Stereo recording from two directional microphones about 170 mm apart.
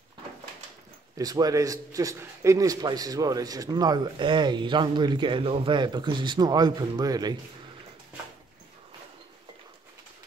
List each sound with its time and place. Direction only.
1.1 s a man's voice: 20° right (ahead or behind)